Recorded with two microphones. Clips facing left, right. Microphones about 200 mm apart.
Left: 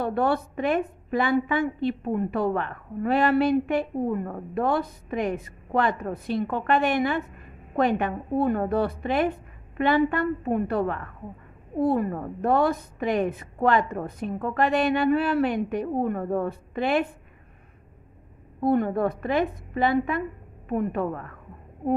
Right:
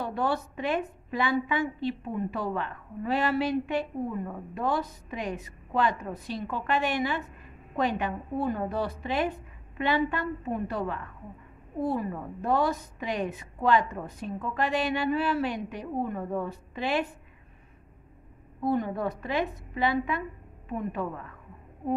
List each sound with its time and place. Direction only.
0.0 s a woman's voice: 55° left (ahead or behind)
18.6 s a woman's voice: 55° left (ahead or behind)